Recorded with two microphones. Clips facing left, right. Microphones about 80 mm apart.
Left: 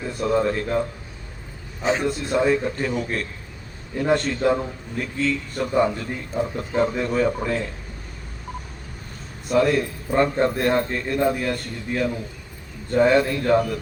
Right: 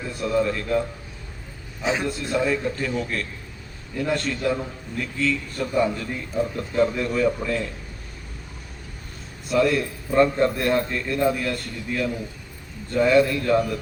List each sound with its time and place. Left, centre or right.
0.2 s a man's voice: left
2.0 s a man's voice: left
9.5 s a man's voice: left